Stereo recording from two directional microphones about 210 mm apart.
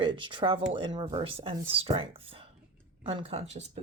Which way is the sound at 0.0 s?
25° right (ahead or behind).